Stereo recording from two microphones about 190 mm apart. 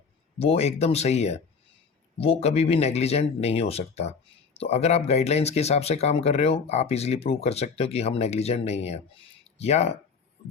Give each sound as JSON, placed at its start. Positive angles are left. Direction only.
{"t": 0.3, "sound": "speech", "side_deg": 30}